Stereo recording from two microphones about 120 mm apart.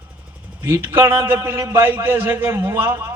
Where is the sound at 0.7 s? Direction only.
20° right (ahead or behind).